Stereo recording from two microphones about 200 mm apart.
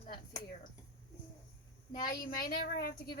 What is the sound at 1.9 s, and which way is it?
A woman's voice, 45° left (ahead or behind).